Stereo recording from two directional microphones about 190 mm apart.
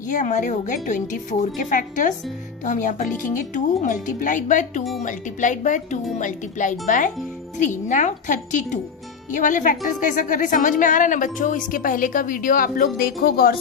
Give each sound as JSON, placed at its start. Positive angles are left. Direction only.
{"t": 0.1, "sound": "a woman's voice", "side_deg": 40}